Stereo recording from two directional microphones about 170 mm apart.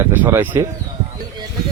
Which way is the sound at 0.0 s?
10° right (ahead or behind).